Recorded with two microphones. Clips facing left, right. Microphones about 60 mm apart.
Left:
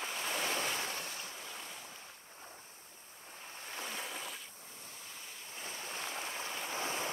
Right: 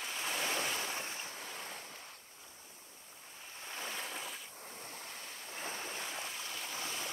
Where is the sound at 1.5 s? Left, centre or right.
Right.